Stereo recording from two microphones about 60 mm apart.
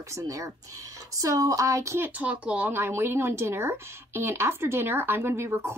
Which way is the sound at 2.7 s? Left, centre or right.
Right.